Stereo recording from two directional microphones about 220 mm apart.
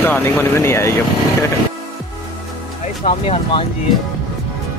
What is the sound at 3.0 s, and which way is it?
Speech, 25° left (ahead or behind).